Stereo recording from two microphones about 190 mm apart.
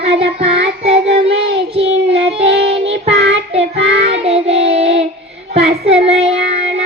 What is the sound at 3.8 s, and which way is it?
Child singing, 30° right (ahead or behind).